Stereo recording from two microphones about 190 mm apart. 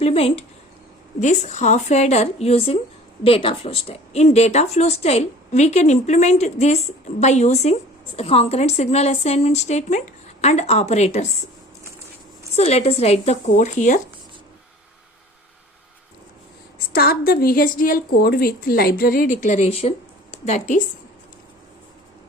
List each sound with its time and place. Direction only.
0.0 s speech: 30° left (ahead or behind)
12.5 s speech: 35° left (ahead or behind)
16.7 s a woman's voice: 55° left (ahead or behind)